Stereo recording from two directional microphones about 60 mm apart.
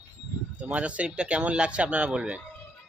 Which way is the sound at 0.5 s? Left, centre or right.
Right.